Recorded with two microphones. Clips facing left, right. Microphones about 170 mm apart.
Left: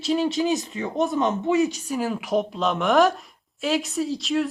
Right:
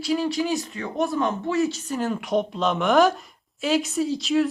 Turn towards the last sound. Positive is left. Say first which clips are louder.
# right 2 dB
turn(degrees=0)  # may be behind; listen again after turning